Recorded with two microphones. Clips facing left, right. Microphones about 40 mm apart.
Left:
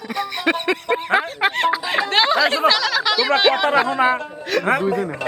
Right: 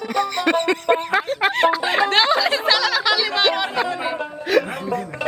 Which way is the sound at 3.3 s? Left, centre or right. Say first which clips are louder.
Left 3 dB; centre.